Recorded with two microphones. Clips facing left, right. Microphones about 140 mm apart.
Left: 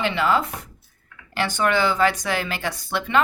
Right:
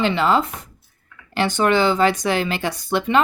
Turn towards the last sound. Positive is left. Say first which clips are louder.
# right 3 dB
turn(degrees=-20)  # may be behind; listen again after turning